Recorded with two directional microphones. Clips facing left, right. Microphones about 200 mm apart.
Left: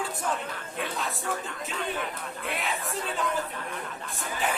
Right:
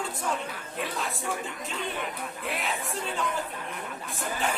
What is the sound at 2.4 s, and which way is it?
Speech, centre (ahead or behind).